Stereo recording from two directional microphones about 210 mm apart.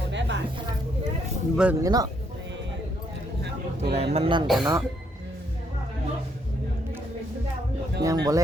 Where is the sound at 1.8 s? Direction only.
15° right (ahead or behind).